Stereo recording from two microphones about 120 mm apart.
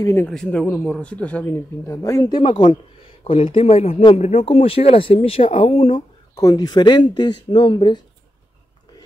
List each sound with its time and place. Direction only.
0.0 s speech: 20° left (ahead or behind)
0.3 s a man's voice: 5° left (ahead or behind); by 6.0 s 50° left (ahead or behind)
6.3 s speech: 30° left (ahead or behind)